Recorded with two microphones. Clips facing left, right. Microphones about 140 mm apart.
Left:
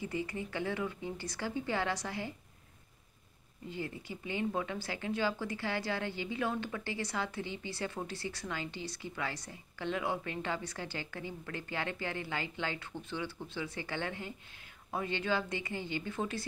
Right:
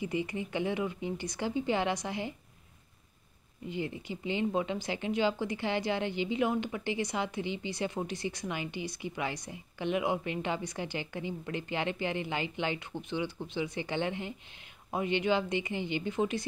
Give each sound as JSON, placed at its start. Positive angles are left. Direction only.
{"t": 0.0, "sound": "speech", "side_deg": -20}
{"t": 3.6, "sound": "speech", "side_deg": -20}